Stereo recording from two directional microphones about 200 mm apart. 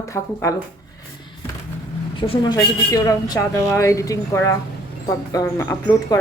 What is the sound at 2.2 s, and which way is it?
Speech, 25° left (ahead or behind).